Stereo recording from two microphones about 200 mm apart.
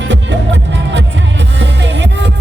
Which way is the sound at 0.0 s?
65° right (ahead or behind).